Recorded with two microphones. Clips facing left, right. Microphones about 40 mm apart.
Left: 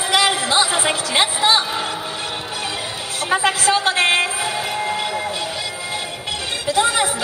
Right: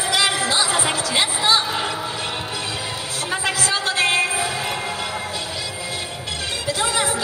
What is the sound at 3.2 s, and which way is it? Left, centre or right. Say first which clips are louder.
Music: left 6 dB; left.